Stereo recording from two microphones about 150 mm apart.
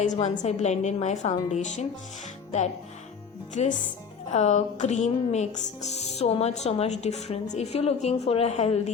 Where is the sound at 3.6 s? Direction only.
50° left (ahead or behind).